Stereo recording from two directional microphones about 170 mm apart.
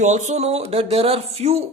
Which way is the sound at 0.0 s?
45° right (ahead or behind).